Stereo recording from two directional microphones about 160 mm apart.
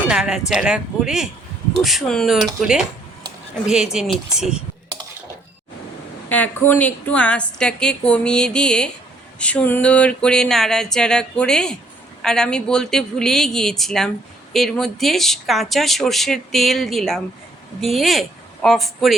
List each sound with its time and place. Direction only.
0.1 s speech: 5° right (ahead or behind)
6.2 s a woman's voice: 10° left (ahead or behind)